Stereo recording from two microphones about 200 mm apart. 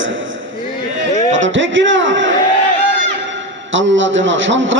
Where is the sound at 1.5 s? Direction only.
70° right (ahead or behind).